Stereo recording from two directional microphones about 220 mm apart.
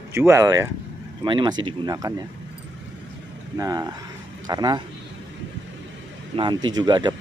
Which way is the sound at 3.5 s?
15° right (ahead or behind).